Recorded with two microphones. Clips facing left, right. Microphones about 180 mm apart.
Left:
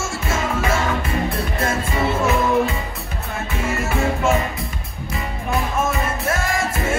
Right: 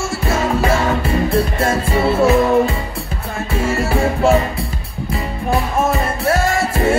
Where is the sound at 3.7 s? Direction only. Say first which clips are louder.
Right 3 dB; 35° right (ahead or behind).